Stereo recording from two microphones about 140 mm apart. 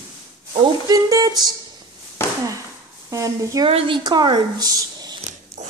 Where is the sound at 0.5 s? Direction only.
25° right (ahead or behind).